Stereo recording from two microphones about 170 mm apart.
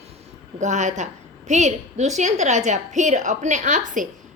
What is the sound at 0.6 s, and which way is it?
A woman's voice, 45° right (ahead or behind).